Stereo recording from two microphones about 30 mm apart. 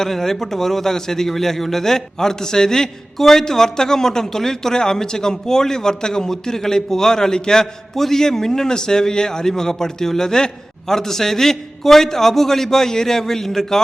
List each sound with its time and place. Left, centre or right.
0.0 s a man's voice: centre
7.9 s a man's voice: centre